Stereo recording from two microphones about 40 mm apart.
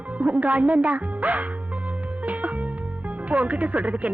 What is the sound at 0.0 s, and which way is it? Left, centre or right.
Music, right.